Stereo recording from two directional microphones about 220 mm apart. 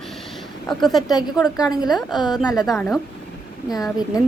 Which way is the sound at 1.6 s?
15° left (ahead or behind).